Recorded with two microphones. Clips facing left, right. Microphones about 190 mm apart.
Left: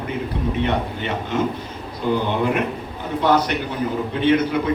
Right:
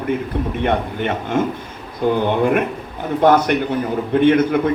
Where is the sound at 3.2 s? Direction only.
50° right (ahead or behind).